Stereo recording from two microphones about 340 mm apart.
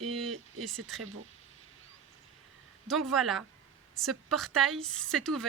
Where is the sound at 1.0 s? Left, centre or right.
Right.